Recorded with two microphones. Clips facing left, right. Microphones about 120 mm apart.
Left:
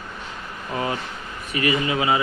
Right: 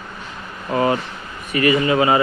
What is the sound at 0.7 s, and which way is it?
Speech, 75° right (ahead or behind).